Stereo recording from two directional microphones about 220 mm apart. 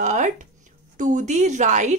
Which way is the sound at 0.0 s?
35° right (ahead or behind).